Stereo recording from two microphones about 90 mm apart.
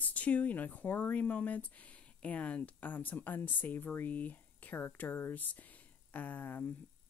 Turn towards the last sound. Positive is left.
turn(degrees=20)  # may be behind; listen again after turning